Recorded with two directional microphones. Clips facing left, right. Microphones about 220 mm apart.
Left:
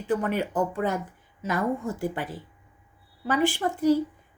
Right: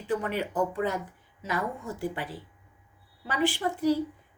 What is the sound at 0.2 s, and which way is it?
Speech, 50° left (ahead or behind).